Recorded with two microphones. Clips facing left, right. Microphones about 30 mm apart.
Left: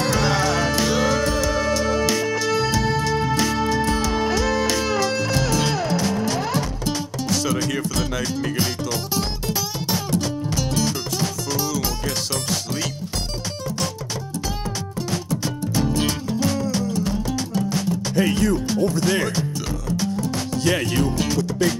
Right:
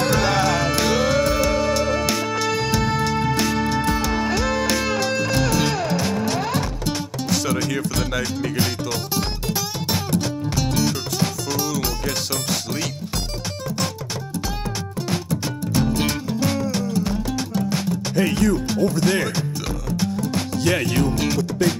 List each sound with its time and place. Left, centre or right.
0.1 s music: centre
7.7 s speech: centre
8.8 s music: centre
15.7 s music: right
20.6 s music: centre